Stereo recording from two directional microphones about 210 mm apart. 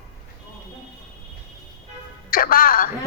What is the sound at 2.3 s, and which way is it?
Speech, 40° left (ahead or behind).